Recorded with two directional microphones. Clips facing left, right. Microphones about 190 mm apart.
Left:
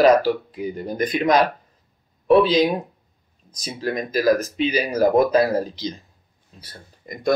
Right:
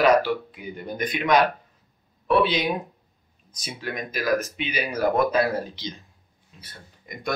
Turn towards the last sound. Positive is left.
turn(degrees=35)  # may be behind; listen again after turning